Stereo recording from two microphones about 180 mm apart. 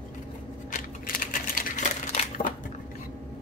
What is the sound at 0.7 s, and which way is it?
Crumpling, 50° left (ahead or behind).